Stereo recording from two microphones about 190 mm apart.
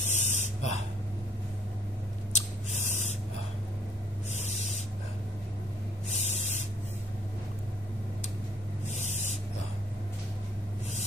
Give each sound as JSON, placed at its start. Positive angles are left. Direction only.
{"t": 0.0, "sound": "a sound", "side_deg": 35}
{"t": 2.7, "sound": "spray", "side_deg": 40}
{"t": 4.3, "sound": "owl", "side_deg": 35}
{"t": 6.0, "sound": "spray", "side_deg": 35}
{"t": 8.8, "sound": "spray", "side_deg": 35}